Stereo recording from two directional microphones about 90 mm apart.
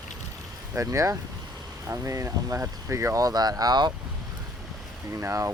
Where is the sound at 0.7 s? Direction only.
35° right (ahead or behind); by 3.9 s 50° right (ahead or behind).